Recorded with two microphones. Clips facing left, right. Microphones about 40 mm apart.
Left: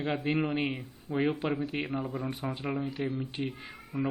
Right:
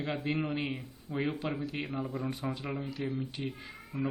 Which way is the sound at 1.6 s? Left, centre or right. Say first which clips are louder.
Left 3 dB; left.